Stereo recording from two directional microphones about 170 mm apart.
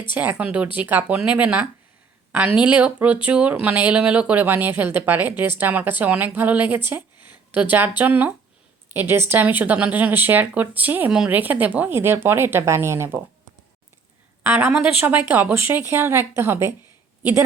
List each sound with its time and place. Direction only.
0.1 s speech: 10° right (ahead or behind)
14.4 s speech: 10° right (ahead or behind)